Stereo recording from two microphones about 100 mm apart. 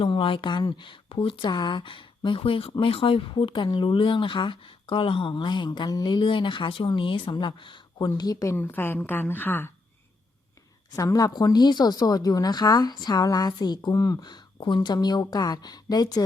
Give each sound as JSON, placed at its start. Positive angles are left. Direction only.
{"t": 0.0, "sound": "speech", "side_deg": 60}
{"t": 7.9, "sound": "speech", "side_deg": 40}
{"t": 8.5, "sound": "a woman's voice", "side_deg": 20}
{"t": 10.9, "sound": "speech", "side_deg": 35}